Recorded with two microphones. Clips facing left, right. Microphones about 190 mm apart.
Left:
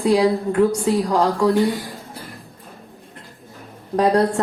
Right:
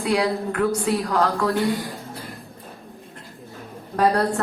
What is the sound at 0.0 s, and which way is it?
A woman's voice, 30° left (ahead or behind).